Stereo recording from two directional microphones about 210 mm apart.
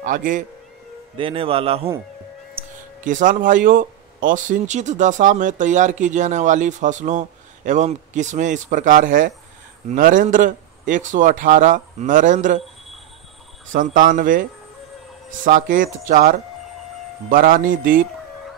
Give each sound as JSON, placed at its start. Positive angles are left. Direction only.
{"t": 0.0, "sound": "speech", "side_deg": -40}
{"t": 1.1, "sound": "speech", "side_deg": -25}
{"t": 3.0, "sound": "speech", "side_deg": -35}
{"t": 13.7, "sound": "speech", "side_deg": -40}
{"t": 15.4, "sound": "speech", "side_deg": -40}